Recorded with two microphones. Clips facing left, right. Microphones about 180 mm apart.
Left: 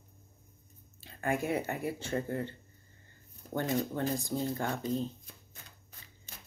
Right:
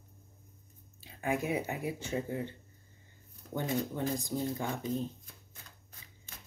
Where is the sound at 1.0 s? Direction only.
5° right (ahead or behind).